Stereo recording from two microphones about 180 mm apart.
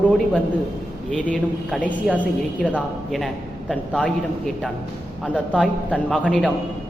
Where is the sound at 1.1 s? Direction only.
5° left (ahead or behind).